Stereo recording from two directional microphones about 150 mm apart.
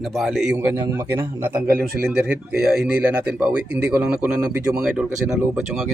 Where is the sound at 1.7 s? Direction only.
85° right.